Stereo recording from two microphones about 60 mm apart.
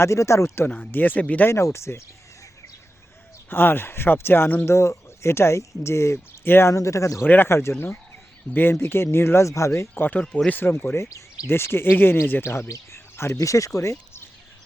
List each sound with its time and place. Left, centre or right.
0.0 s speech: left
0.9 s speech: left
1.5 s speech: left
3.5 s speech: left
4.7 s speech: left
6.4 s speech: left
6.7 s speech: left
7.3 s speech: left
7.5 s speech: left
9.9 s speech: left
11.0 s speech: left
11.4 s speech: left
12.9 s bird: left
13.4 s speech: left